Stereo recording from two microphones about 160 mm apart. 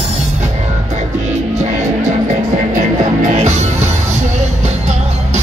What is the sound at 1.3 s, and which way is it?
Music, 45° right (ahead or behind).